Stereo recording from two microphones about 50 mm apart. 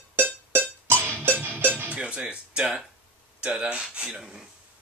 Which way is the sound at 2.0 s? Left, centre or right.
Right.